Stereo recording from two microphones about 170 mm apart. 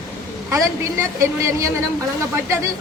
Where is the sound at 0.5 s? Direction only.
15° right (ahead or behind).